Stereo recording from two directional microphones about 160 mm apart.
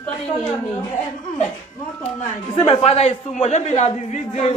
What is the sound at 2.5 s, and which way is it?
A man's voice, 35° left (ahead or behind).